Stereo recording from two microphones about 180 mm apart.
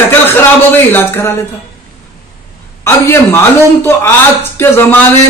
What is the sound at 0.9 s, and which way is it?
Speech, 10° left (ahead or behind).